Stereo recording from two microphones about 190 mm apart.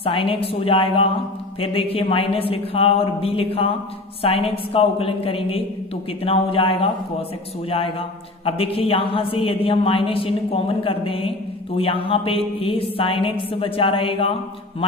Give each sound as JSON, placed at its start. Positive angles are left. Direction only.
{"t": 0.0, "sound": "a man's voice", "side_deg": 30}
{"t": 8.5, "sound": "a man's voice", "side_deg": 30}